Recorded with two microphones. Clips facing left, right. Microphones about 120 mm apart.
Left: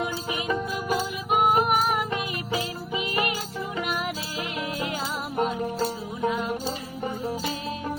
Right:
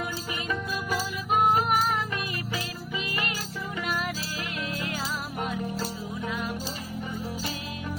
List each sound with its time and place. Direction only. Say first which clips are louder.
0.0 s music: left 4 dB; 25° left (ahead or behind)
5.4 s music: left 7 dB; 30° left (ahead or behind)